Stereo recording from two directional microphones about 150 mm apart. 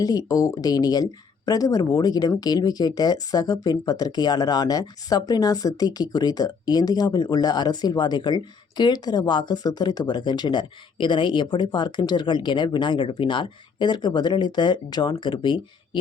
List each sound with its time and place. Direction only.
0.0 s speech: 25° left (ahead or behind)